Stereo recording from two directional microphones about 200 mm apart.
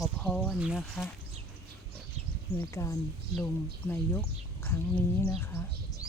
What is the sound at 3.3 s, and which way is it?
Speech, 5° left (ahead or behind).